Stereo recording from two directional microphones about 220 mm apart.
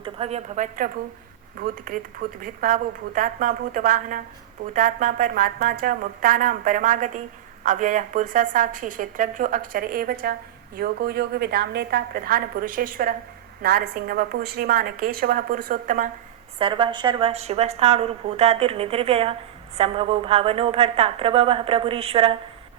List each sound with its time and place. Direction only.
0.0 s a woman's voice: 30° right (ahead or behind)
16.6 s a woman's voice: 25° right (ahead or behind)